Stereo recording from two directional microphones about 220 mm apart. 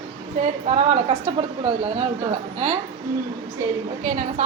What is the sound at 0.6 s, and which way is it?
Speech, 25° right (ahead or behind).